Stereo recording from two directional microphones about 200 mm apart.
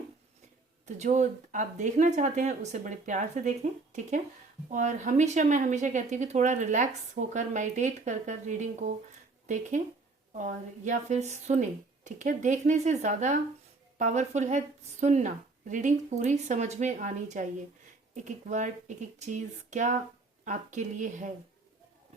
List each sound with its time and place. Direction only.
0.9 s speech: 35° right (ahead or behind)
18.4 s speech: 35° right (ahead or behind)